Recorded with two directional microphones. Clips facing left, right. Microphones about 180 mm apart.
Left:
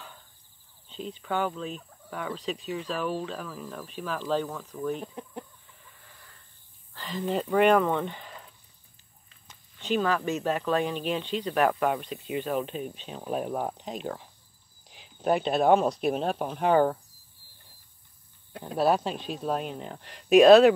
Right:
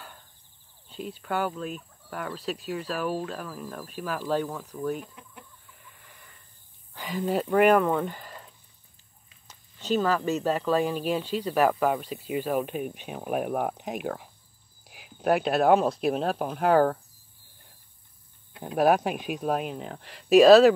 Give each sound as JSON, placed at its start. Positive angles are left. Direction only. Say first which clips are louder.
{"t": 0.8, "sound": "speech", "louder": "even", "side_deg": -5}
{"t": 5.0, "sound": "speech", "louder": "left 10 dB", "side_deg": 35}
{"t": 6.0, "sound": "a sound", "louder": "right 1 dB", "side_deg": -15}
{"t": 6.9, "sound": "speech", "louder": "right 2 dB", "side_deg": -10}
{"t": 9.5, "sound": "a sound", "louder": "right 2 dB", "side_deg": -40}
{"t": 9.9, "sound": "speech", "louder": "right 2 dB", "side_deg": -5}
{"t": 18.6, "sound": "speech", "louder": "right 2 dB", "side_deg": -15}